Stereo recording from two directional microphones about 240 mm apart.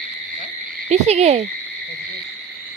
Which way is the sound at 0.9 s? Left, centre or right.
Right.